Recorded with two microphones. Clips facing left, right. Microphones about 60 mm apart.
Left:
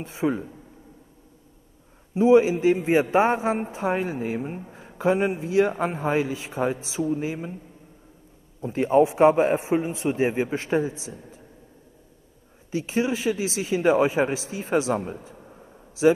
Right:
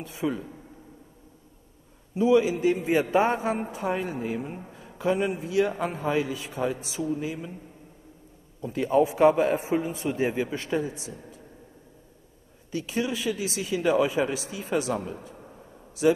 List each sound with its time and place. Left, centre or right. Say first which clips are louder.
0.0 s a man's voice: left 4 dB; left
2.1 s a man's voice: left 4 dB; left
8.5 s a man's voice: left 3 dB; left
12.7 s a man's voice: left 4 dB; left